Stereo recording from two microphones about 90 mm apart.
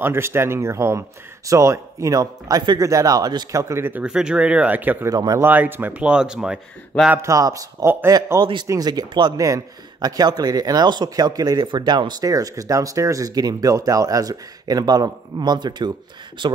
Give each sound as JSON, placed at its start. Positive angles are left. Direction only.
{"t": 0.0, "sound": "speech", "side_deg": -25}
{"t": 3.5, "sound": "speech", "side_deg": -30}
{"t": 3.9, "sound": "speech", "side_deg": -10}
{"t": 5.0, "sound": "speech", "side_deg": -40}
{"t": 5.4, "sound": "speech", "side_deg": -20}
{"t": 7.2, "sound": "speech", "side_deg": -35}